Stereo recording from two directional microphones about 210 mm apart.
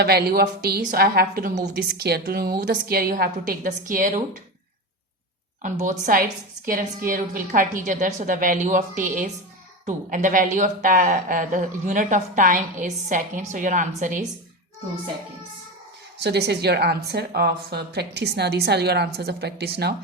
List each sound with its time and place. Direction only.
0.0 s a woman's voice: 50° right (ahead or behind)
5.6 s a woman's voice: 35° right (ahead or behind)
16.1 s a woman's voice: 50° right (ahead or behind)